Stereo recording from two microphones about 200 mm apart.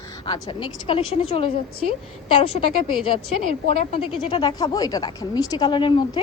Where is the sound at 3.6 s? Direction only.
30° left (ahead or behind).